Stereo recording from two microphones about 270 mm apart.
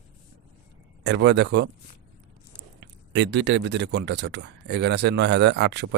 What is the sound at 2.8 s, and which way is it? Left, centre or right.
Speech, right.